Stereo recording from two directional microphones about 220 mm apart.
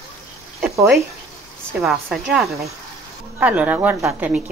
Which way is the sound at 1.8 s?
Centre (ahead or behind).